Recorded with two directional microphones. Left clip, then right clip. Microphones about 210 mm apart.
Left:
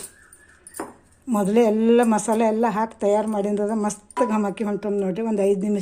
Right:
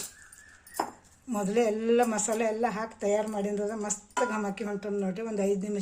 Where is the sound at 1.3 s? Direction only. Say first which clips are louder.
Left 8 dB; 30° left (ahead or behind).